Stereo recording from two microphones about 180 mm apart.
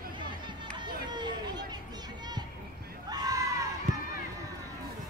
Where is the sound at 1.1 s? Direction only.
25° right (ahead or behind).